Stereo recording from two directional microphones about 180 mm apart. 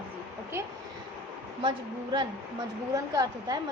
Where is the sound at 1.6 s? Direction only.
25° right (ahead or behind).